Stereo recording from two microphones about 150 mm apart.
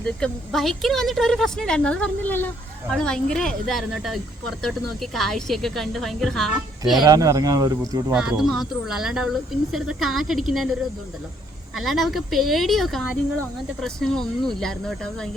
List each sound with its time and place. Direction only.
0.0 s a woman's voice: 5° left (ahead or behind)
7.0 s speech: 25° right (ahead or behind)
8.1 s a woman's voice: 5° right (ahead or behind)
11.8 s a woman's voice: centre (ahead or behind)